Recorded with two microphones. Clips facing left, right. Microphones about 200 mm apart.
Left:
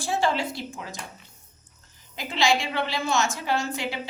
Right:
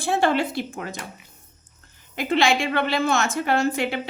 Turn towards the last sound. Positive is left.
turn(degrees=-60)  # may be behind; listen again after turning